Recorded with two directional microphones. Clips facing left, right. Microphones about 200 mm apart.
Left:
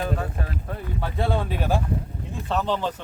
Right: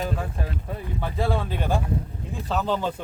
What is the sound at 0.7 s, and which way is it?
Speech, centre (ahead or behind).